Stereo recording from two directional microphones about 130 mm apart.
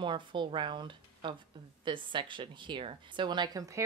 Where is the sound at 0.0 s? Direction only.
40° right (ahead or behind).